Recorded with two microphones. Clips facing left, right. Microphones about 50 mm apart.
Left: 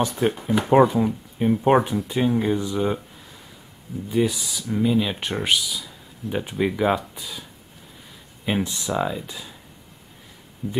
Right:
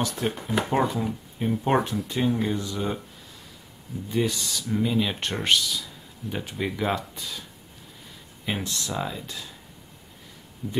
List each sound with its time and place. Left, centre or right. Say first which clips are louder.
0.1 s speech: left 5 dB; centre
0.7 s speech: left 11 dB; centre
4.1 s speech: left 4 dB; centre
8.5 s speech: left 5 dB; centre